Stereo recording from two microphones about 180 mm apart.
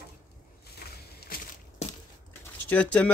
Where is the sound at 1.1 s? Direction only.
55° left (ahead or behind).